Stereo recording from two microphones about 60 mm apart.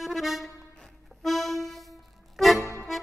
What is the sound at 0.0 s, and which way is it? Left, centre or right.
Music, centre.